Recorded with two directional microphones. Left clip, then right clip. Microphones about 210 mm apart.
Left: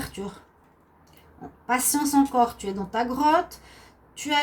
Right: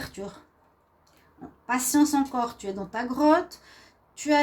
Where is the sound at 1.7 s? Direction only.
35° right (ahead or behind).